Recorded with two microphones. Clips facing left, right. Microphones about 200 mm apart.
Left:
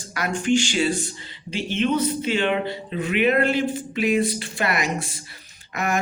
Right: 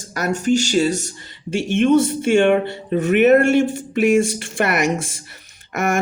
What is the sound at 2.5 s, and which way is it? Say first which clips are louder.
Speech: right 7 dB; 50° right (ahead or behind).